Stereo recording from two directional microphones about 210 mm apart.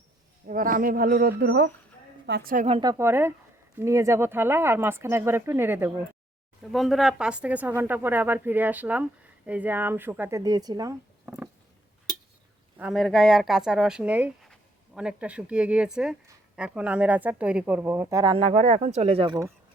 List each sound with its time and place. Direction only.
0.4 s a man's voice: 40° right (ahead or behind)
2.6 s speech: 25° right (ahead or behind)
2.9 s speech: 10° right (ahead or behind)
6.6 s speech: centre (ahead or behind)
12.7 s speech: 5° right (ahead or behind); by 19.5 s 25° right (ahead or behind)